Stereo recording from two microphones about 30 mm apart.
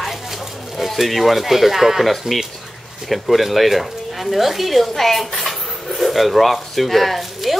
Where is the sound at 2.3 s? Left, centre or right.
Right.